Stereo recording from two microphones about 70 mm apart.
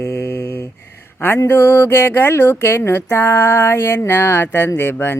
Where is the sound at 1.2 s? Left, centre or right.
Left.